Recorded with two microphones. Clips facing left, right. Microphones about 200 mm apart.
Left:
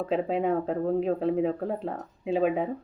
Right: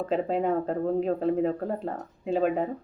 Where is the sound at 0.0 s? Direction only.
Centre (ahead or behind).